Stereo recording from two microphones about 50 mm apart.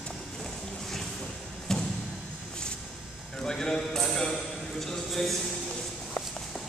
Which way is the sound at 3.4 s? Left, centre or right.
Centre.